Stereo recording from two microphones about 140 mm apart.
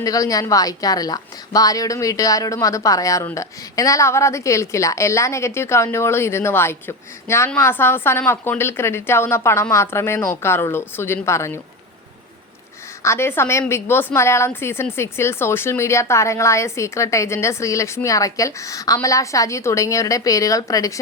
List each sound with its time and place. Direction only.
0.0 s a woman's voice: 25° left (ahead or behind)
13.0 s a woman's voice: 20° left (ahead or behind)